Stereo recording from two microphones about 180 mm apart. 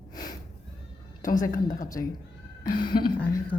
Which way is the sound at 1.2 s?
50° left (ahead or behind).